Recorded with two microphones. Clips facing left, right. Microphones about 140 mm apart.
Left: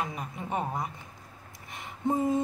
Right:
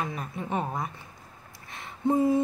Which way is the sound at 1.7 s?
20° left (ahead or behind).